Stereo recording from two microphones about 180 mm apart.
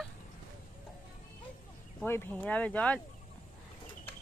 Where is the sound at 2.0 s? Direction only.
10° left (ahead or behind).